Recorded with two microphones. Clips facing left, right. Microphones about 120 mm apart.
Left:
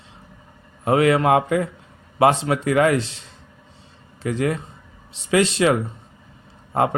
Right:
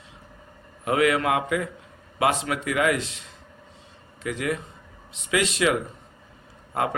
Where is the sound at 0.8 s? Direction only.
30° left (ahead or behind).